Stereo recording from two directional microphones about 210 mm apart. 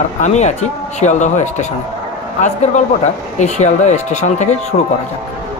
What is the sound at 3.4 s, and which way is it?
Speech, 35° left (ahead or behind).